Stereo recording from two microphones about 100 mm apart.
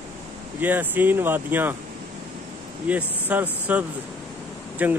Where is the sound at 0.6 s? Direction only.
20° right (ahead or behind).